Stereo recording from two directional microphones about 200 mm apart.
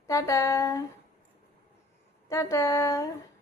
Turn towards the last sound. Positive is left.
turn(degrees=15)  # may be behind; listen again after turning